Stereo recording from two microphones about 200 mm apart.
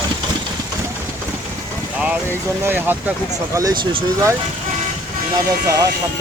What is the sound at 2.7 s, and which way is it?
Speech, 10° right (ahead or behind).